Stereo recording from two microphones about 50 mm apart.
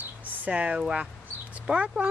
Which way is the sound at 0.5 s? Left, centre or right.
Right.